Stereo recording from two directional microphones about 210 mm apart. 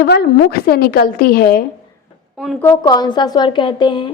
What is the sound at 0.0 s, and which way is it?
A woman's voice, 50° left (ahead or behind).